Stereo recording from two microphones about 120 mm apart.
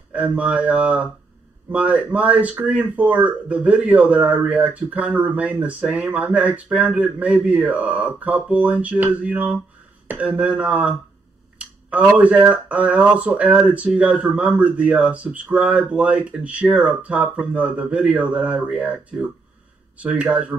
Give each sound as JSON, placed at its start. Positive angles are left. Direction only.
{"t": 0.3, "sound": "speech", "side_deg": -10}